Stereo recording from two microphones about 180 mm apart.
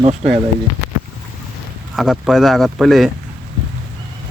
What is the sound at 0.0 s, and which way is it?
Speech, 35° right (ahead or behind).